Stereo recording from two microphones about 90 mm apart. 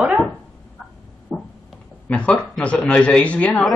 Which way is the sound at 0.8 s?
Centre (ahead or behind).